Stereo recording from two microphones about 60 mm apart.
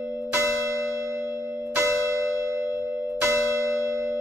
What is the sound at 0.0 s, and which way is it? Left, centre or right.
Church bell, right.